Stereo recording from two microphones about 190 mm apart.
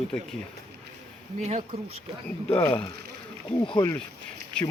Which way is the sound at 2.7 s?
20° left (ahead or behind).